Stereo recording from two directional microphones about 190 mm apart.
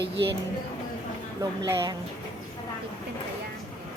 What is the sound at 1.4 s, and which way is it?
Speech, 20° right (ahead or behind).